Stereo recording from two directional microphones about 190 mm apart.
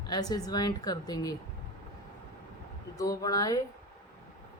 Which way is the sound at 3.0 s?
20° left (ahead or behind).